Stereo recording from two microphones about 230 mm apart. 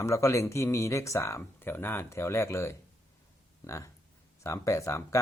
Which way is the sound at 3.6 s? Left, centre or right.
Centre.